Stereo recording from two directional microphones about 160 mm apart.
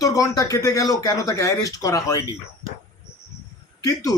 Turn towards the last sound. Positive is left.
turn(degrees=20)  # may be behind; listen again after turning